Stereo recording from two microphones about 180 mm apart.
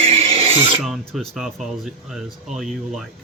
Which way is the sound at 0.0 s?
35° right (ahead or behind).